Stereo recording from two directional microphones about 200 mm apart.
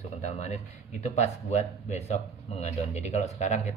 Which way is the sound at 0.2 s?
35° left (ahead or behind).